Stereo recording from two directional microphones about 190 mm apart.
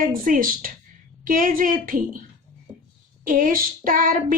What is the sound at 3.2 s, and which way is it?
Speech, 45° right (ahead or behind).